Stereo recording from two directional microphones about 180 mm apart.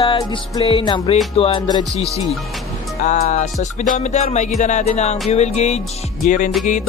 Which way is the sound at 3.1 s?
50° left (ahead or behind).